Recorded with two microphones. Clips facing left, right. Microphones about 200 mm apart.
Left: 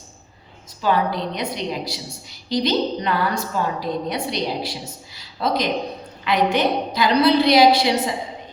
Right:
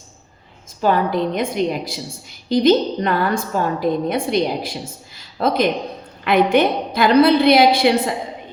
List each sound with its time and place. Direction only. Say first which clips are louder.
0.8 s a woman's voice: right 3 dB; 50° right (ahead or behind)